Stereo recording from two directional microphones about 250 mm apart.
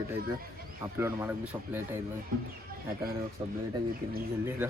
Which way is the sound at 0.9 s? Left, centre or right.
Centre.